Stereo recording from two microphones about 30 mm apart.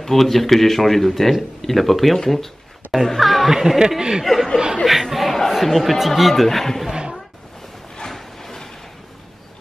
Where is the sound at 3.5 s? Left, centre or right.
Centre.